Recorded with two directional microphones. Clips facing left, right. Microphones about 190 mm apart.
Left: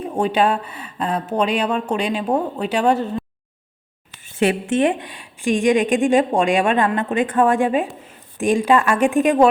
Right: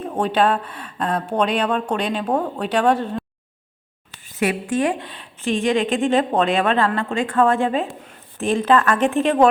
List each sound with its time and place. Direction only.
0.0 s a woman's voice: 10° left (ahead or behind)
4.4 s a woman's voice: 25° left (ahead or behind)